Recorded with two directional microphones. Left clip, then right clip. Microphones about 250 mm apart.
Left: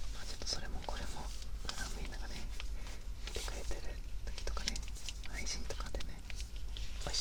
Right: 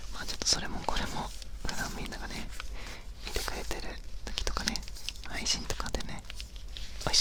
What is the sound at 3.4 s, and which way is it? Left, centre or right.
Whispering, right.